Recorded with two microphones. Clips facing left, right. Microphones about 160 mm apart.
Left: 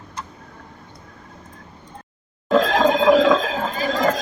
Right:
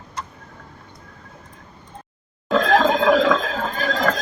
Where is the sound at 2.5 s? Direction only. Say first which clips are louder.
Even; 15° left (ahead or behind).